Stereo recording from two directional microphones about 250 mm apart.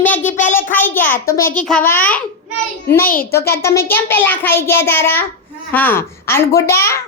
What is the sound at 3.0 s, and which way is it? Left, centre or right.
Speech, left.